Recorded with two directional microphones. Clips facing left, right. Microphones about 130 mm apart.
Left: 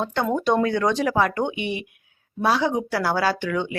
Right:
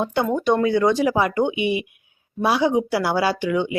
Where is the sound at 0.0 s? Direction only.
10° right (ahead or behind).